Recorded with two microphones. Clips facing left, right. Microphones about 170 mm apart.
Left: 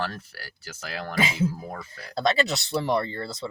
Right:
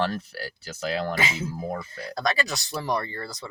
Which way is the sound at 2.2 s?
25° left (ahead or behind).